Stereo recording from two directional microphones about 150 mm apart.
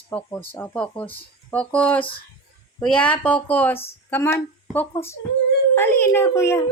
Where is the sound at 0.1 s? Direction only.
10° left (ahead or behind).